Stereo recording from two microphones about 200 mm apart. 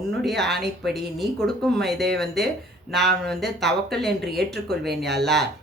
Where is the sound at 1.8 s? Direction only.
55° right (ahead or behind).